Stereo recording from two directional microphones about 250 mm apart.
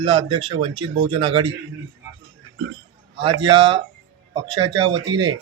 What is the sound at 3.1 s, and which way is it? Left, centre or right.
Speech, centre.